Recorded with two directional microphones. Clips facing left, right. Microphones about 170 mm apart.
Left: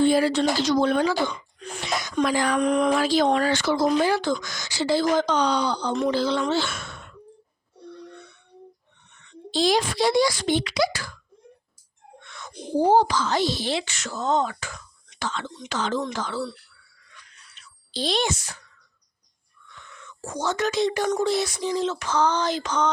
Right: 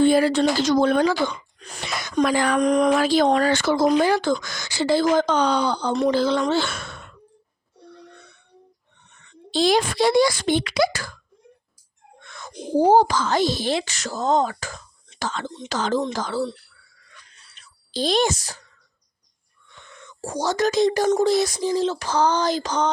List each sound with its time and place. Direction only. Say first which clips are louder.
0.0 s speech: right 3 dB; 55° right (ahead or behind)
2.2 s speech: right 3 dB; 60° right (ahead or behind)
2.6 s speech: right 3 dB; 40° right (ahead or behind)
3.0 s speech: right 3 dB; 55° right (ahead or behind)
5.9 s speech: right 4 dB; 35° right (ahead or behind)
6.1 s speech: right 3 dB; 50° right (ahead or behind)
9.5 s speech: right 2 dB; 60° right (ahead or behind)
12.2 s a sound: right 2 dB; 45° right (ahead or behind)
12.7 s speech: right 3 dB; 40° right (ahead or behind)
17.2 s a sound: left 1 dB; 30° right (ahead or behind)
17.6 s a child's voice: right 4 dB; 45° right (ahead or behind)
19.6 s whispering: right 1 dB; 30° right (ahead or behind)
21.2 s speech: right 4 dB; 40° right (ahead or behind)